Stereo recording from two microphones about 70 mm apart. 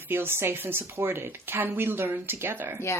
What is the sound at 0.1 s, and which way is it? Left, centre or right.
Speech, right.